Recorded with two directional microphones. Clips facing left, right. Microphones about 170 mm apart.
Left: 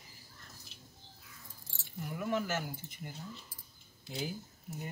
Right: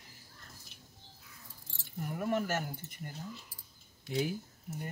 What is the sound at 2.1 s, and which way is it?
Speech, 45° right (ahead or behind).